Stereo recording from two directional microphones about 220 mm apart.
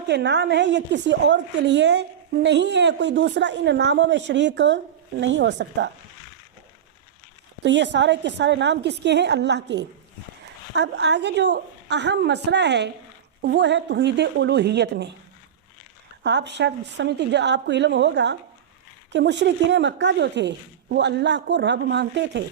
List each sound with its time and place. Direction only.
0.1 s a woman's voice: 50° right (ahead or behind)
7.6 s a woman's voice: 55° right (ahead or behind)
16.2 s a woman's voice: 55° right (ahead or behind)